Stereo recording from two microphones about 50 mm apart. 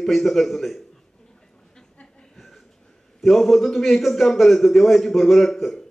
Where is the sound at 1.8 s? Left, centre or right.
Centre.